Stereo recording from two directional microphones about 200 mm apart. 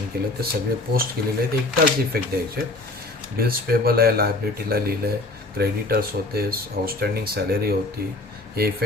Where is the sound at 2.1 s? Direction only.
50° right (ahead or behind).